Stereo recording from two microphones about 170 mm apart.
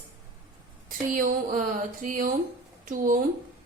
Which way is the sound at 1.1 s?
50° right (ahead or behind).